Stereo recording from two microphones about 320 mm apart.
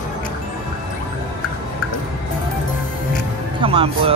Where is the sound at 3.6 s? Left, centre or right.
Centre.